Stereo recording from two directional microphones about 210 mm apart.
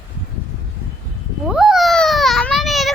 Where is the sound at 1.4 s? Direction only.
Centre (ahead or behind).